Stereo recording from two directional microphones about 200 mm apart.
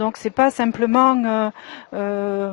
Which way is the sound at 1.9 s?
20° left (ahead or behind).